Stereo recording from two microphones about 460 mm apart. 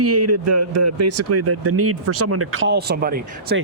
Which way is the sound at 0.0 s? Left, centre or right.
Right.